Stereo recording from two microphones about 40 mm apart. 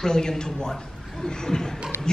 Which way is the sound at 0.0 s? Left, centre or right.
Centre.